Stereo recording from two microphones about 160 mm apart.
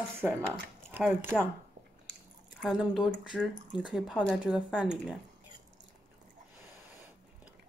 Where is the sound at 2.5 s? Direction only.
Centre (ahead or behind).